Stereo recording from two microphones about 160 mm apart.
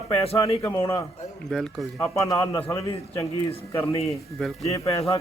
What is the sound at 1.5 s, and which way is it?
Speech, centre (ahead or behind).